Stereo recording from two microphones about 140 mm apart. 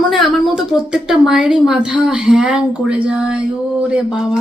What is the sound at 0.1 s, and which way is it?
A woman's voice, centre (ahead or behind).